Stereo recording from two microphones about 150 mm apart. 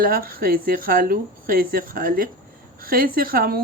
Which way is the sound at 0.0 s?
75° right (ahead or behind).